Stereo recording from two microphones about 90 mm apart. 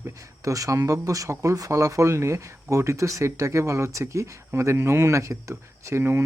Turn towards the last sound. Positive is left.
turn(degrees=-30)  # may be behind; listen again after turning